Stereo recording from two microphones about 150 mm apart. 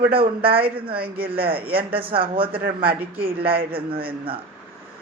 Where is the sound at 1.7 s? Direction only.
35° right (ahead or behind).